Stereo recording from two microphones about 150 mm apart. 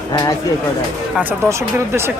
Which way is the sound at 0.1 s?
25° left (ahead or behind).